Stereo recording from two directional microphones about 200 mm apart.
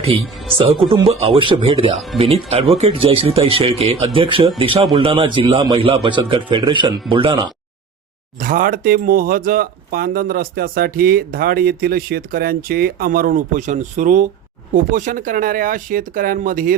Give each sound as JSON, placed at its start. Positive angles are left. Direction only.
{"t": 0.9, "sound": "speech", "side_deg": -25}
{"t": 8.4, "sound": "speech", "side_deg": -45}